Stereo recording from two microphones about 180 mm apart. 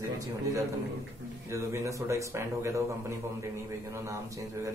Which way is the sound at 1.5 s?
15° right (ahead or behind).